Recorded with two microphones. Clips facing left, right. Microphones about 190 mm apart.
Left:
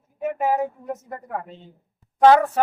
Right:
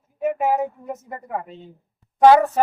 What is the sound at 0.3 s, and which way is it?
A man's voice, 5° right (ahead or behind).